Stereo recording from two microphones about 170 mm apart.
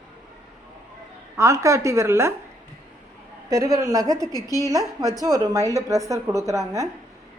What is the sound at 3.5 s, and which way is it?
A woman's voice, 20° right (ahead or behind).